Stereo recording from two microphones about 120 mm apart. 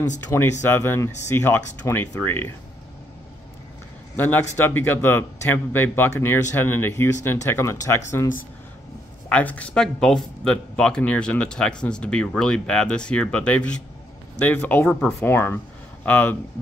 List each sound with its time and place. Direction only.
0.3 s speech: 20° left (ahead or behind)
4.2 s speech: 15° left (ahead or behind)
9.3 s speech: 10° left (ahead or behind)
15.1 s speech: 20° left (ahead or behind)